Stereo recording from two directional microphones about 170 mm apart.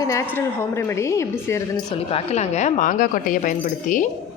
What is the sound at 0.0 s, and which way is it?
A woman's voice, 20° left (ahead or behind).